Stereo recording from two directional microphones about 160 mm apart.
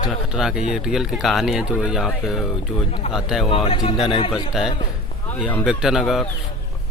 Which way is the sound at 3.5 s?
35° left (ahead or behind).